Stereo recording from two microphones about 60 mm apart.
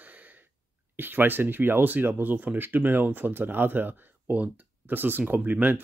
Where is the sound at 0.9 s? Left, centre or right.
Right.